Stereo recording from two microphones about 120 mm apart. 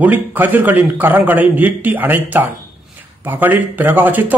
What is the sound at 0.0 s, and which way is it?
Speech, 15° right (ahead or behind).